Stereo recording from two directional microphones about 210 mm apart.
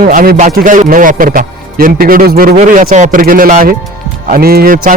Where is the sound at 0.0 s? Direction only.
40° right (ahead or behind).